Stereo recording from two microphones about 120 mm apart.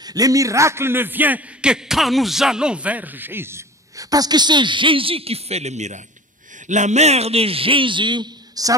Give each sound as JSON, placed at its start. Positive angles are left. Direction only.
{"t": 0.0, "sound": "a man's voice", "side_deg": -30}